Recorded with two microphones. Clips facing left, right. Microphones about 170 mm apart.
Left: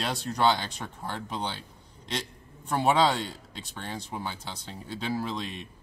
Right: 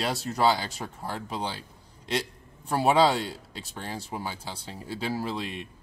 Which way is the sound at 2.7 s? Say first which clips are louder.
Right 2 dB; 5° right (ahead or behind).